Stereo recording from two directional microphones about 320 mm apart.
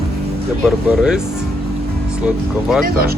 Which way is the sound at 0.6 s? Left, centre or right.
Centre.